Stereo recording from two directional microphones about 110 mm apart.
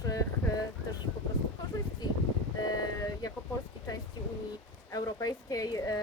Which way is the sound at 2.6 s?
35° left (ahead or behind).